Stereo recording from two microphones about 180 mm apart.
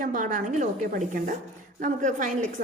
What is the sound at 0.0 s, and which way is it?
A woman's voice, 45° right (ahead or behind).